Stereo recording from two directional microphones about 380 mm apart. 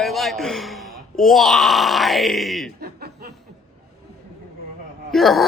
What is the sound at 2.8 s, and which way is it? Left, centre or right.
Chuckle, right.